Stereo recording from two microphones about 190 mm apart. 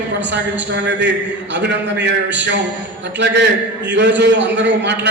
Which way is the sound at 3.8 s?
65° right (ahead or behind).